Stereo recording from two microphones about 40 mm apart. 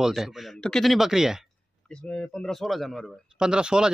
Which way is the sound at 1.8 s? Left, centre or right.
Left.